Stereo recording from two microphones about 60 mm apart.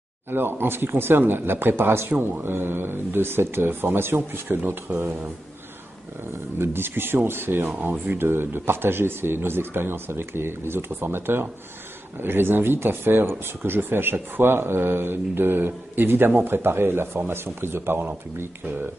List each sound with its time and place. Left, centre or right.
0.3 s speech: right
6.6 s speech: right